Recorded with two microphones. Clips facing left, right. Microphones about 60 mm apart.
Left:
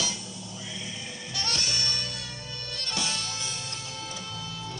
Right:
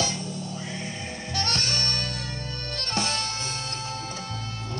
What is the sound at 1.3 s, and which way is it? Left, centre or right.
Music, right.